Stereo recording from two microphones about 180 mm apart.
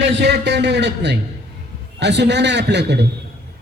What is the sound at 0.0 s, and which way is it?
A man's voice, 70° right (ahead or behind).